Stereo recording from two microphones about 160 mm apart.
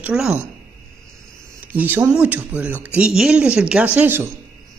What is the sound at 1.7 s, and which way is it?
Speech, 15° right (ahead or behind).